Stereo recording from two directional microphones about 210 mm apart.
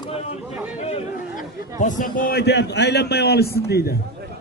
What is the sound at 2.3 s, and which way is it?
A man's voice, 50° left (ahead or behind).